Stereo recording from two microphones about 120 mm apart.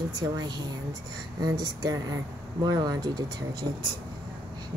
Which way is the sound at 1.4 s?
35° right (ahead or behind).